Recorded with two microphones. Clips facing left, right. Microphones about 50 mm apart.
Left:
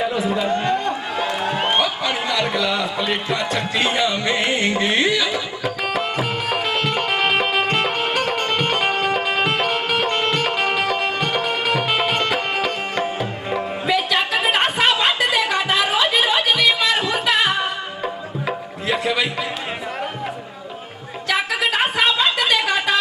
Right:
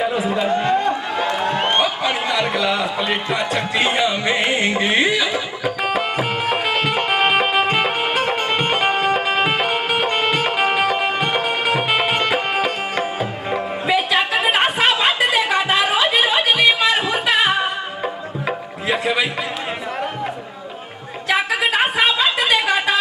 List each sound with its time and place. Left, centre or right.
0.0 s music: centre
2.0 s speech: centre
6.5 s music: centre
11.4 s music: right
11.9 s music: centre
13.8 s a sound: centre
21.3 s a sound: centre